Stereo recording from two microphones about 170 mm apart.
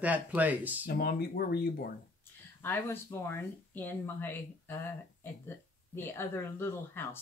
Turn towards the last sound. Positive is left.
turn(degrees=15)  # may be behind; listen again after turning